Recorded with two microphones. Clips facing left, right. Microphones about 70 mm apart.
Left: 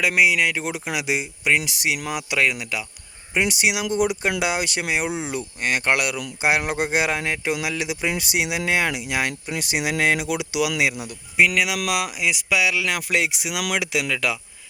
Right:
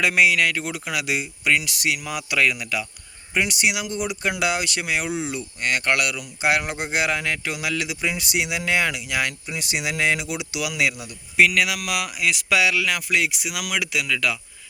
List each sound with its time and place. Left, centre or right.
0.0 s speech: centre
0.6 s speech: left
3.9 s speech: left
10.8 s speech: left
11.3 s speech: centre
13.1 s speech: left